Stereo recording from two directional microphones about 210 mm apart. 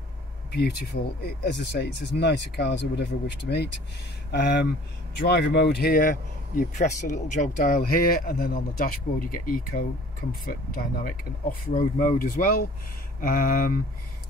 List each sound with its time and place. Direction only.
0.5 s speech: 50° left (ahead or behind)